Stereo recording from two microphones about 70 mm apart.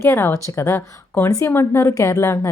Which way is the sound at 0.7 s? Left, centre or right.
Left.